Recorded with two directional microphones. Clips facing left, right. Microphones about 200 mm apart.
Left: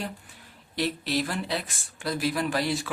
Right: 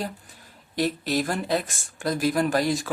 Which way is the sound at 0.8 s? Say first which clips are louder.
Right 3 dB; 45° right (ahead or behind).